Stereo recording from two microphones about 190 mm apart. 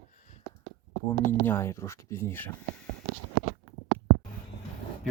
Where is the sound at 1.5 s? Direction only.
10° left (ahead or behind).